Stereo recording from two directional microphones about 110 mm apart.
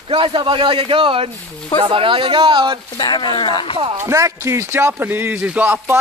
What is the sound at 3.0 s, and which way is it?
Speech, 45° left (ahead or behind).